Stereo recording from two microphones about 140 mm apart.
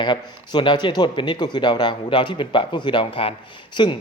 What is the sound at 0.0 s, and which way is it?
Speech, 35° left (ahead or behind).